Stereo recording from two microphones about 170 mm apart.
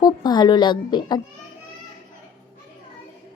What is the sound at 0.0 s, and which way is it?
A woman's voice, 25° left (ahead or behind).